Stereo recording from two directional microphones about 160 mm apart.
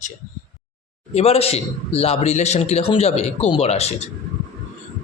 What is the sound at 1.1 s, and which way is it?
A man's voice, 40° left (ahead or behind).